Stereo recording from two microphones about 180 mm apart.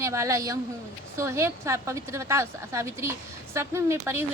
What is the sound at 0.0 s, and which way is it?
A woman's voice, 15° right (ahead or behind).